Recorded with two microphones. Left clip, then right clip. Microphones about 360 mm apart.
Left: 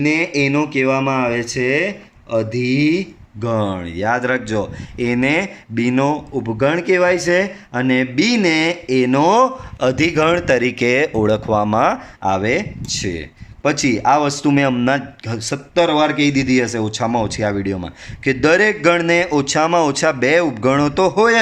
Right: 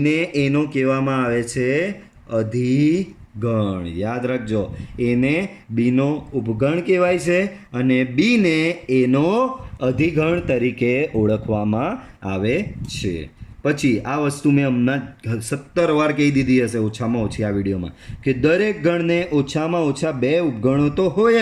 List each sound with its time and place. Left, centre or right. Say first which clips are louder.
0.0 s speech: left 3 dB; centre